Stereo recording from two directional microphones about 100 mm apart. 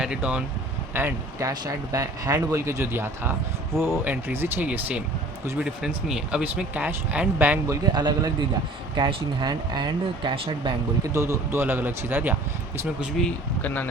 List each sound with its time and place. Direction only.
0.0 s speech: 10° right (ahead or behind)
0.9 s speech: 20° right (ahead or behind)
1.4 s speech: 35° right (ahead or behind); by 7.6 s 15° right (ahead or behind)
7.7 s speech: 40° right (ahead or behind)
10.3 s speech: 60° right (ahead or behind)
11.1 s speech: 30° right (ahead or behind)
13.2 s speech: centre (ahead or behind)
13.6 s speech: 15° left (ahead or behind)